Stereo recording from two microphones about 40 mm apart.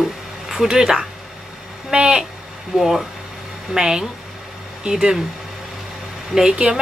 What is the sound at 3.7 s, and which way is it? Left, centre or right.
Speech, centre.